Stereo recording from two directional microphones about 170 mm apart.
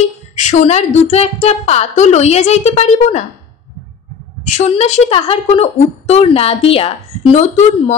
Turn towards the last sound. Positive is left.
turn(degrees=40)  # may be behind; listen again after turning